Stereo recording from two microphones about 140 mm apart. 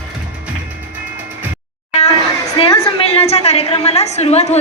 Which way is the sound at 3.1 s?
50° left (ahead or behind).